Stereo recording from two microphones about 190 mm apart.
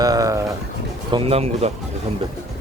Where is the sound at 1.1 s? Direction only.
30° right (ahead or behind).